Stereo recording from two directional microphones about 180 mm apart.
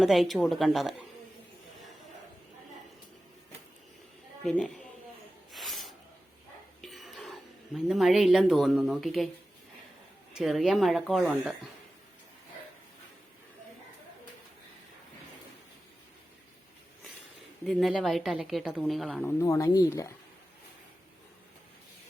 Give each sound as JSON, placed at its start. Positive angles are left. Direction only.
{"t": 0.0, "sound": "a woman's voice", "side_deg": 0}
{"t": 4.4, "sound": "a woman's voice", "side_deg": 5}
{"t": 5.5, "sound": "a sound", "side_deg": 0}
{"t": 6.8, "sound": "speech", "side_deg": 0}
{"t": 10.3, "sound": "a woman's voice", "side_deg": 0}
{"t": 17.6, "sound": "a woman's voice", "side_deg": 0}
{"t": 19.4, "sound": "speech", "side_deg": 15}